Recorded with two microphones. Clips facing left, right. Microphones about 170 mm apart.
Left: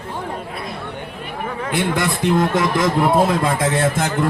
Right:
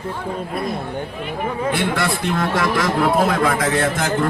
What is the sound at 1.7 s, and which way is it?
A man's voice, 15° left (ahead or behind).